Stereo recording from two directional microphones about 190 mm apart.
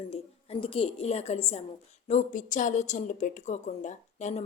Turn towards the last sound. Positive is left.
turn(degrees=35)  # may be behind; listen again after turning